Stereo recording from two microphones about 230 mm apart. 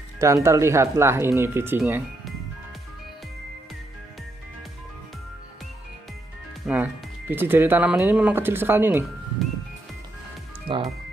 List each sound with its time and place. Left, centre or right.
0.2 s speech: centre
6.6 s speech: centre
9.4 s music: centre
10.7 s speech: right